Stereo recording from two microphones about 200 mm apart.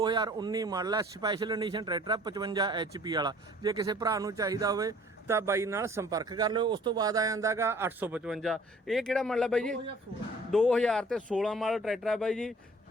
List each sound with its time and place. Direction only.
0.0 s speech: 20° right (ahead or behind); by 12.5 s centre (ahead or behind)